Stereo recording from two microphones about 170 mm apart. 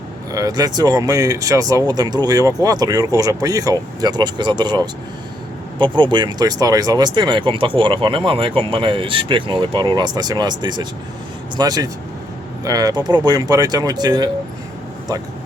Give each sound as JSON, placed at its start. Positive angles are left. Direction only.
{"t": 0.3, "sound": "speech", "side_deg": -20}